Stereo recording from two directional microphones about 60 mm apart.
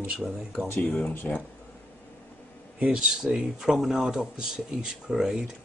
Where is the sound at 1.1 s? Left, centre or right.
Left.